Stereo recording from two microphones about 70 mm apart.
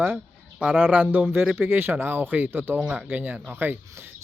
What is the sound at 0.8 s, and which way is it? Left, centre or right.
Speech, right.